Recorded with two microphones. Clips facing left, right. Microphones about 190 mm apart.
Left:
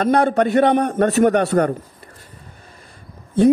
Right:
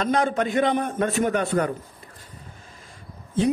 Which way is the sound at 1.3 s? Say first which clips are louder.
Left 6 dB; 70° left (ahead or behind).